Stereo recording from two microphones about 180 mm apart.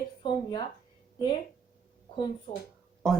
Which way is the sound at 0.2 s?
25° left (ahead or behind).